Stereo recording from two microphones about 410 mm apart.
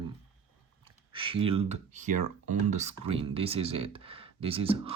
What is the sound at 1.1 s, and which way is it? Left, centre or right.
Speech, centre.